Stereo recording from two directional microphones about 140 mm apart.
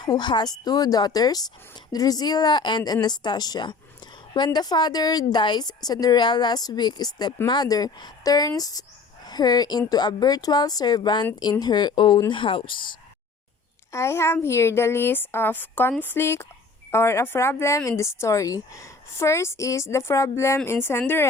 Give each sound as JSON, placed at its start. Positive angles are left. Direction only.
{"t": 0.0, "sound": "speech", "side_deg": 30}
{"t": 13.9, "sound": "a woman's voice", "side_deg": 20}